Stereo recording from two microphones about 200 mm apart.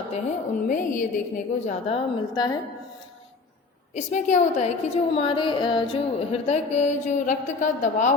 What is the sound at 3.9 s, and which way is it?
Speech, 35° left (ahead or behind).